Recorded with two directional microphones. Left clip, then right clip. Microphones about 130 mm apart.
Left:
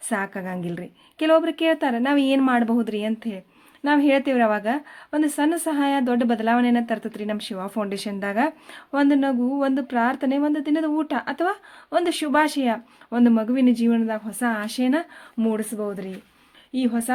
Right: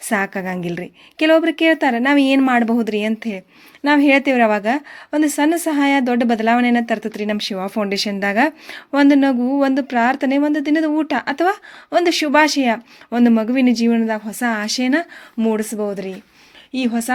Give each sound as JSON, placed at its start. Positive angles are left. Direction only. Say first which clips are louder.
{"t": 0.1, "sound": "speech", "louder": "right 7 dB", "side_deg": -25}